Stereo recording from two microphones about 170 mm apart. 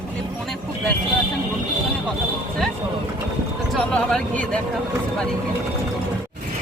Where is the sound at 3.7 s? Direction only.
5° left (ahead or behind).